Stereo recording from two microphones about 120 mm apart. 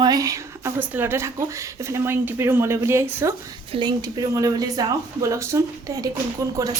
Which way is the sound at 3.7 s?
40° right (ahead or behind).